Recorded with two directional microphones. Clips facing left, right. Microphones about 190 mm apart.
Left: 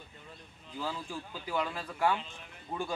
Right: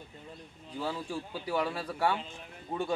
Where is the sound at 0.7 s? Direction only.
30° right (ahead or behind).